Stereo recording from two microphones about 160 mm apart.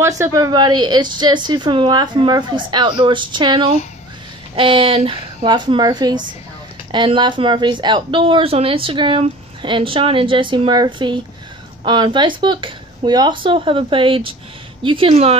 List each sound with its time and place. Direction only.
0.2 s a woman's voice: 20° right (ahead or behind); by 15.3 s 40° right (ahead or behind)